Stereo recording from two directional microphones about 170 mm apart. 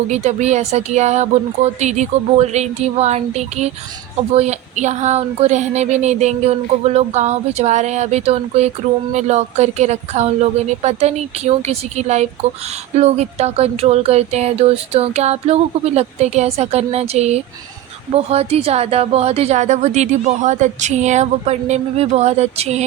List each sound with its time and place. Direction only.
0.1 s speech: 40° right (ahead or behind)